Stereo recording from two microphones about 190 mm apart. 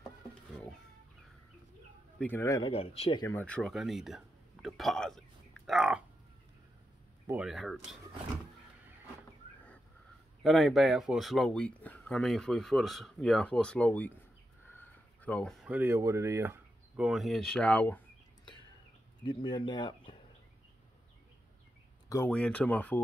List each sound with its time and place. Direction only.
2.1 s speech: 10° left (ahead or behind)
2.7 s speech: 30° left (ahead or behind)
3.3 s speech: 5° left (ahead or behind)
5.7 s a sound: 5° right (ahead or behind)
7.2 s speech: 5° right (ahead or behind)
10.4 s speech: centre (ahead or behind)
19.2 s speech: 25° left (ahead or behind)
22.1 s speech: 10° left (ahead or behind)